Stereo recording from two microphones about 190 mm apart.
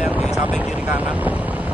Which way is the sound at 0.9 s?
10° right (ahead or behind).